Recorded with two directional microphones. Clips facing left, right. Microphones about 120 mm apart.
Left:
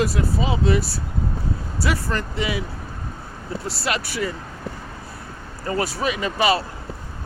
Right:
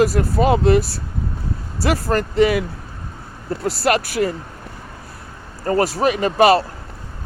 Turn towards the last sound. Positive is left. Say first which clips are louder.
# right 7 dB
turn(degrees=-45)  # may be behind; listen again after turning